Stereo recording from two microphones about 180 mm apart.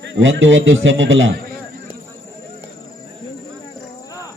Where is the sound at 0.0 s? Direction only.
85° right.